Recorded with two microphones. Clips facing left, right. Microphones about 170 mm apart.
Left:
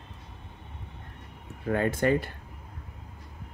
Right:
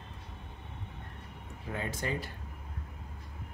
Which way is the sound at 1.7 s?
60° left (ahead or behind).